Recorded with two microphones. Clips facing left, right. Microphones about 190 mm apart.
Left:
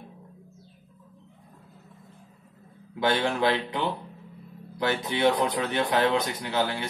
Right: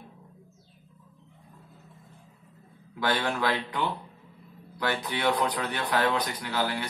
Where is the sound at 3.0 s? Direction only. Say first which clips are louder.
Left 3 dB; 25° left (ahead or behind).